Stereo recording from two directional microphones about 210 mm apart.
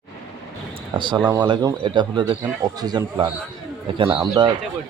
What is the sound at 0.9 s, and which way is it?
Speech, 20° right (ahead or behind).